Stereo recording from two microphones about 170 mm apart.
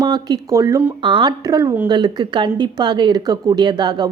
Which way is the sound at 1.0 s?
30° right (ahead or behind).